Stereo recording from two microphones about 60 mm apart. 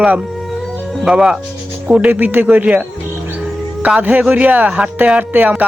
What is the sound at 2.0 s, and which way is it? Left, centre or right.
Speech, right.